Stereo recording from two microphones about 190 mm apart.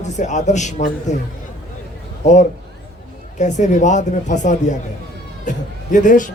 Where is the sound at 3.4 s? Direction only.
40° left (ahead or behind).